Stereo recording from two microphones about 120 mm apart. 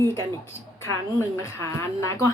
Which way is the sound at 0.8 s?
20° left (ahead or behind).